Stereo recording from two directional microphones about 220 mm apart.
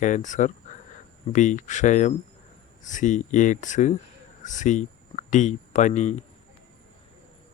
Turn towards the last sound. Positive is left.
turn(degrees=30)  # may be behind; listen again after turning